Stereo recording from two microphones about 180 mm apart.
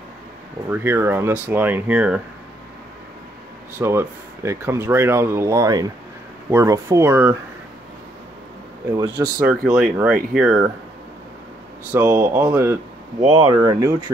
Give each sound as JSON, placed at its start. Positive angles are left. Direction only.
{"t": 0.7, "sound": "speech", "side_deg": -15}
{"t": 3.7, "sound": "speech", "side_deg": -15}
{"t": 9.4, "sound": "speech", "side_deg": -10}
{"t": 11.9, "sound": "speech", "side_deg": -10}
{"t": 13.2, "sound": "speech", "side_deg": -25}